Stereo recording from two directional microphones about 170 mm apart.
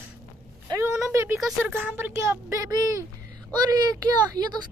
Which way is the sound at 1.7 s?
10° right (ahead or behind).